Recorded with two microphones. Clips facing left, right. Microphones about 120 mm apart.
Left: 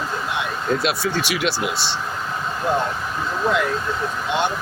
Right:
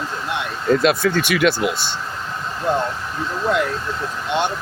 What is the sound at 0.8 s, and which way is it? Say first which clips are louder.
Speech: right 5 dB; 50° right (ahead or behind).